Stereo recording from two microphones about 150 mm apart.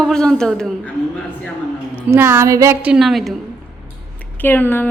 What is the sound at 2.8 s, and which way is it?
Speech, 5° right (ahead or behind).